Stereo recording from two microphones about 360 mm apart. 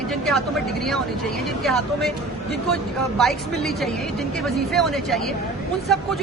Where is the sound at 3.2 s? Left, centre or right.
Centre.